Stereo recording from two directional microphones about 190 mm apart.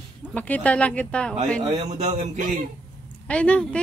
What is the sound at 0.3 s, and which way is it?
Speech, 5° left (ahead or behind).